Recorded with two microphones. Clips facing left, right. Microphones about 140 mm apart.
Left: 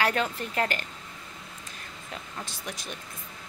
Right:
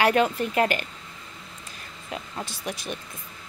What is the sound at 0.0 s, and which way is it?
Speech, 15° right (ahead or behind).